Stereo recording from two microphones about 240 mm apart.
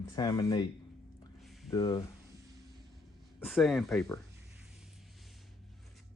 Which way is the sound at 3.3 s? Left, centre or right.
Centre.